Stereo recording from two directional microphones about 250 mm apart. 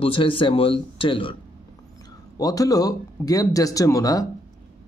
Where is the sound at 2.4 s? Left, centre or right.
Centre.